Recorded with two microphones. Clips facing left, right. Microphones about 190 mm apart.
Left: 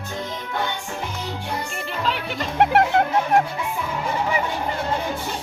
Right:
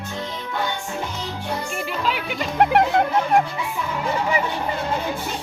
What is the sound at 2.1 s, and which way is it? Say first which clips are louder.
Music: even; 5° right (ahead or behind).